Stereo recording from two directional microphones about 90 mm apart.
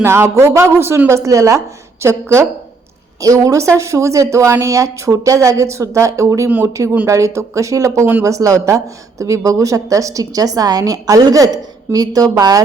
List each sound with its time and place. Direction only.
0.0 s a woman's voice: 30° right (ahead or behind); by 12.6 s 45° right (ahead or behind)